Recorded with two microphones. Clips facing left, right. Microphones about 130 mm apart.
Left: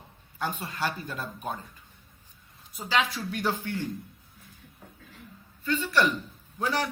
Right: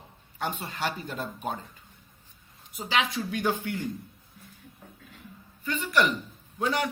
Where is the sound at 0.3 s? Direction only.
25° right (ahead or behind).